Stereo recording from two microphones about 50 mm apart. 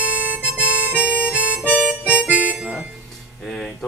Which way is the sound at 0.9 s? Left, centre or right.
Left.